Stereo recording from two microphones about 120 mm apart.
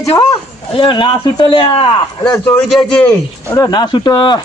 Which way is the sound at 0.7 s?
45° left (ahead or behind).